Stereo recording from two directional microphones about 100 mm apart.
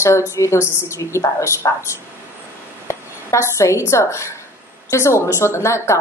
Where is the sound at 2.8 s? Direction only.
30° left (ahead or behind).